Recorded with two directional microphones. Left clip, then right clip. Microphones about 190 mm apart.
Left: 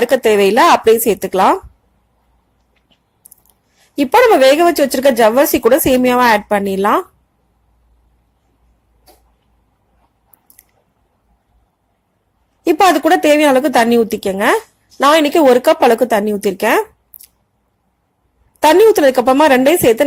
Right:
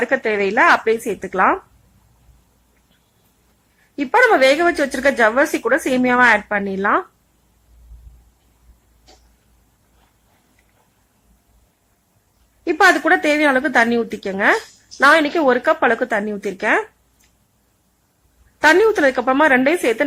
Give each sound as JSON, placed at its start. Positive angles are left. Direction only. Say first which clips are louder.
{"t": 0.0, "sound": "speech", "louder": "left 7 dB", "side_deg": 30}
{"t": 4.0, "sound": "speech", "louder": "left 4 dB", "side_deg": 30}
{"t": 12.7, "sound": "speech", "louder": "left 3 dB", "side_deg": 20}
{"t": 18.6, "sound": "speech", "louder": "left 5 dB", "side_deg": 25}